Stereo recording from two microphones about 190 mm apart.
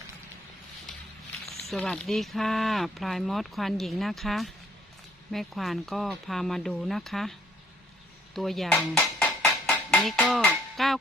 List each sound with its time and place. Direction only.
1.5 s speech: centre (ahead or behind)
8.4 s speech: centre (ahead or behind)
9.0 s music: 15° left (ahead or behind)
9.6 s a sound: centre (ahead or behind)